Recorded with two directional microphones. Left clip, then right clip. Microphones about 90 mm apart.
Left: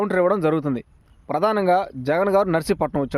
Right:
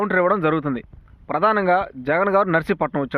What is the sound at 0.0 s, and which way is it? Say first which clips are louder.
Speech: right 1 dB; 40° left (ahead or behind).